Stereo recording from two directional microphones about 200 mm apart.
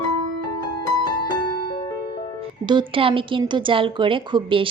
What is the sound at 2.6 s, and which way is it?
A woman's voice, 25° right (ahead or behind).